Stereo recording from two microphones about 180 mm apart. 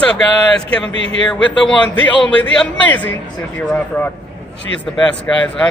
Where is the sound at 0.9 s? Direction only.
90° left.